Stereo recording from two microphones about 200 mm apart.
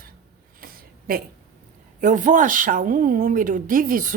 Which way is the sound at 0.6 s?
45° right (ahead or behind).